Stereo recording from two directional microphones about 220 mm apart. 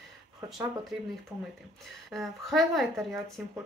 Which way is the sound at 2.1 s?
Centre (ahead or behind).